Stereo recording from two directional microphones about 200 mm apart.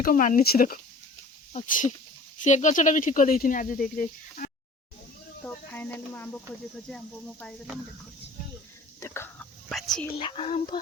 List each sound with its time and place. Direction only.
0.0 s speech: 40° left (ahead or behind)
5.7 s speech: 10° left (ahead or behind)
9.0 s chicken: 10° left (ahead or behind)
9.6 s speech: centre (ahead or behind)
10.2 s speech: 25° left (ahead or behind)